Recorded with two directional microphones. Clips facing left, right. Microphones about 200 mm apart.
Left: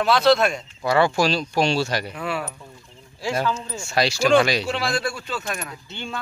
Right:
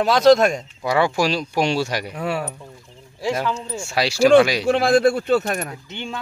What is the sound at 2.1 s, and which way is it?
Speech, 40° right (ahead or behind).